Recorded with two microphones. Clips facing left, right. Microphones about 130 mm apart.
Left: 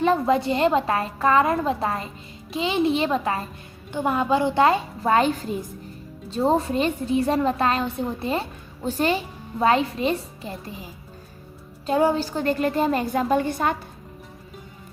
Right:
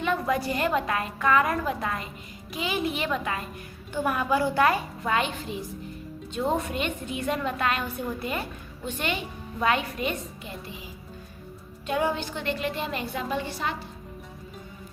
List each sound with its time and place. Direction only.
0.0 s a woman's voice: 30° left (ahead or behind)
5.1 s a woman's voice: 40° left (ahead or behind)